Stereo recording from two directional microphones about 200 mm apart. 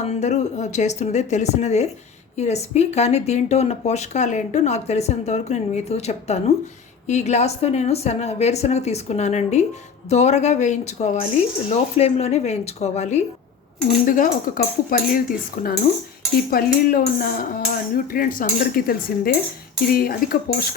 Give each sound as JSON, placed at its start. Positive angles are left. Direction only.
{"t": 0.0, "sound": "speech", "side_deg": 35}